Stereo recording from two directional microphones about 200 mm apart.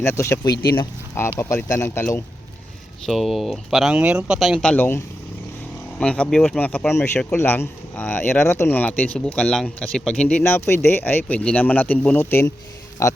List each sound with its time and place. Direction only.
0.0 s speech: 10° left (ahead or behind)
0.5 s speech: 50° left (ahead or behind)
0.8 s speech: 15° left (ahead or behind)